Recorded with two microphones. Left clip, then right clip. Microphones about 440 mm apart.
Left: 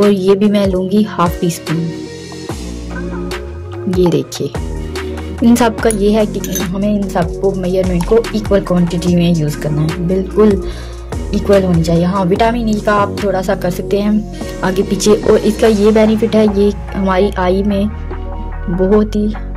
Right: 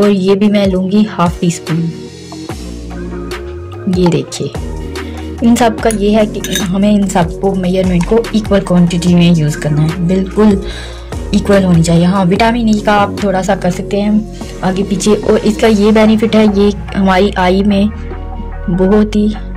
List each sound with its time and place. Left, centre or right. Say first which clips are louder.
0.1 s speech: even; left
4.0 s speech: even; left
18.9 s speech: right 2 dB; left